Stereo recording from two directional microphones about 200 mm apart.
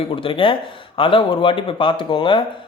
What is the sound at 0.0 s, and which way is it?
Speech, 25° left (ahead or behind).